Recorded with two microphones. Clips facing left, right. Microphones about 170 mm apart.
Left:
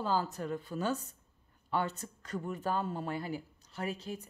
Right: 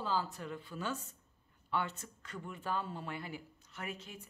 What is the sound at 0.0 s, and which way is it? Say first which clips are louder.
Speech: left 4 dB; 45° left (ahead or behind).